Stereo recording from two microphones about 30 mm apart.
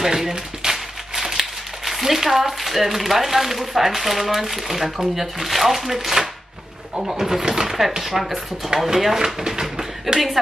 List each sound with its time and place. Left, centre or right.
0.0 s speech: centre
8.0 s speech: centre
9.5 s a sound: centre
10.1 s speech: right